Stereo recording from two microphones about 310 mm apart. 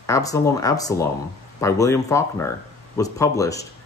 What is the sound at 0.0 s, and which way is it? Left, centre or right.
Speech, centre.